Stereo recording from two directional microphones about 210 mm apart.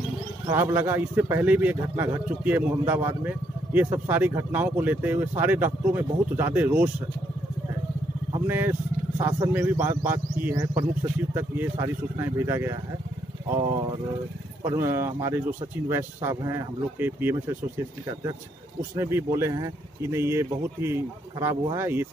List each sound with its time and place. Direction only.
0.5 s a man's voice: 10° right (ahead or behind)
8.5 s a man's voice: 10° right (ahead or behind)
13.6 s a sound: 20° right (ahead or behind)
14.6 s a man's voice: 15° right (ahead or behind)
18.9 s a man's voice: 10° right (ahead or behind)